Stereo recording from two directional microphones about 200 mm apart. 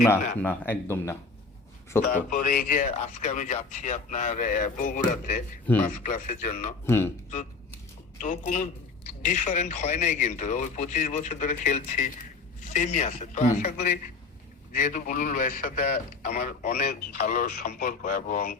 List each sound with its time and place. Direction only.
0.3 s speech: 10° left (ahead or behind)
2.1 s speech: 45° left (ahead or behind)
6.8 s speech: 10° left (ahead or behind)
8.2 s a man's voice: 40° left (ahead or behind)